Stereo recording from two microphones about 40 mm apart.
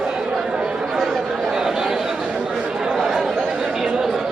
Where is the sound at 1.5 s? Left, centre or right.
Centre.